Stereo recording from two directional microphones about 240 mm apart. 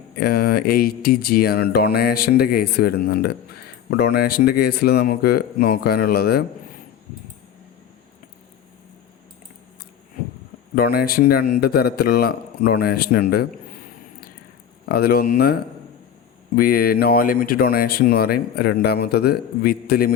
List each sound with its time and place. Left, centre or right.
0.2 s speech: left
10.8 s speech: left
14.8 s speech: left
16.6 s speech: left